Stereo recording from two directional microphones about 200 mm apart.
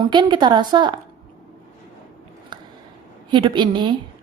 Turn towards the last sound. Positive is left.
turn(degrees=-25)  # may be behind; listen again after turning